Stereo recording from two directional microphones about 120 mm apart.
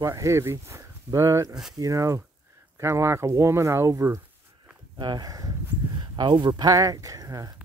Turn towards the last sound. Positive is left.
turn(degrees=-30)  # may be behind; listen again after turning